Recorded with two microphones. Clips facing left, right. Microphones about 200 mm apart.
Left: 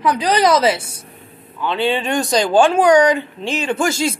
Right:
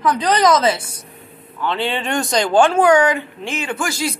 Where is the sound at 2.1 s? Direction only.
15° left (ahead or behind).